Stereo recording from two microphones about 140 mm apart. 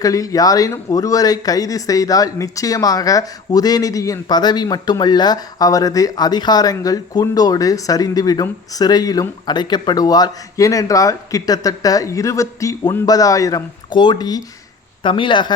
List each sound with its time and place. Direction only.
0.0 s speech: 25° left (ahead or behind)